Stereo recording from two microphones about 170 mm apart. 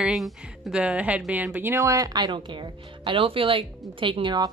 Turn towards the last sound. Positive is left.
turn(degrees=-30)  # may be behind; listen again after turning